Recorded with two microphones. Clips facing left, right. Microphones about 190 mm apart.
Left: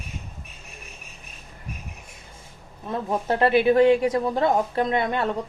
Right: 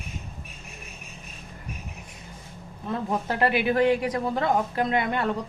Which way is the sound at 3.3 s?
25° left (ahead or behind).